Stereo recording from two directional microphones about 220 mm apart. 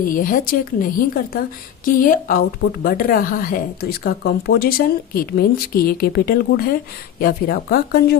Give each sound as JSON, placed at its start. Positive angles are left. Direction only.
{"t": 0.0, "sound": "a woman's voice", "side_deg": 40}